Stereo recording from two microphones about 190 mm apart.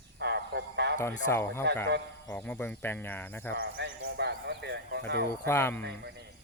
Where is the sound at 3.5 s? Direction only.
60° right (ahead or behind).